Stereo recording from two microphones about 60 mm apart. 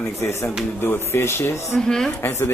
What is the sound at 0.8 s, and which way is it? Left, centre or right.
Speech, left.